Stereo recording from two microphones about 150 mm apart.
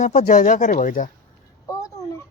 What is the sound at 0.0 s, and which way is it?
Speech, 55° left (ahead or behind).